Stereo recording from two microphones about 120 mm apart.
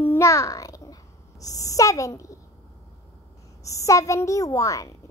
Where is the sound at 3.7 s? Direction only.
25° left (ahead or behind).